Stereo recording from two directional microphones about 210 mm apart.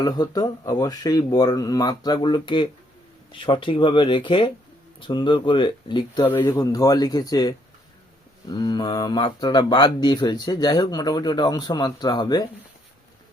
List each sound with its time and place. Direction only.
0.0 s speech: 20° left (ahead or behind)
6.2 s speech: 10° left (ahead or behind)